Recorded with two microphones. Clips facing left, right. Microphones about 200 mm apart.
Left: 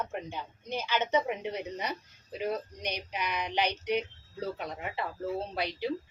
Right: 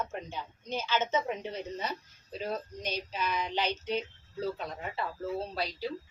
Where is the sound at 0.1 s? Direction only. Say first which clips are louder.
Left 2 dB; 15° left (ahead or behind).